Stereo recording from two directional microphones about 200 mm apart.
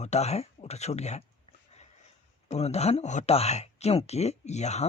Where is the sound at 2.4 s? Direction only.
30° left (ahead or behind).